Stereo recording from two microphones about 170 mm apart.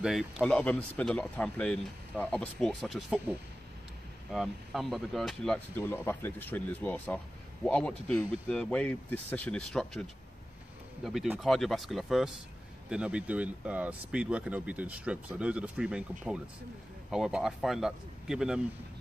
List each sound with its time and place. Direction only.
0.4 s speech: 5° left (ahead or behind)
11.1 s speech: centre (ahead or behind)